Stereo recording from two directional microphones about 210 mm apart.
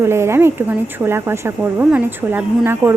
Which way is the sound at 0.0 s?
10° right (ahead or behind).